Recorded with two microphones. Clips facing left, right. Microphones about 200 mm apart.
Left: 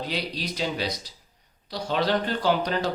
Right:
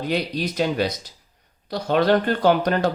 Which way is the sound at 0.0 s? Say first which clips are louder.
Right 7 dB; 50° right (ahead or behind).